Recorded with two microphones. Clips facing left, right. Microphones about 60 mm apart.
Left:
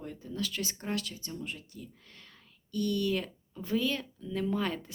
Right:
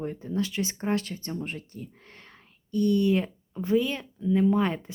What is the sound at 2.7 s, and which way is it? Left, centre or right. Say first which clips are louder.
Speech: right 7 dB; right.